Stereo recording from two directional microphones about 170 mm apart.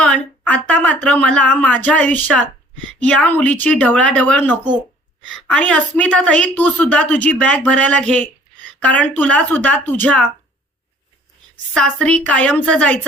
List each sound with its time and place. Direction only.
0.0 s a woman's voice: 5° left (ahead or behind)
11.7 s a woman's voice: 5° left (ahead or behind)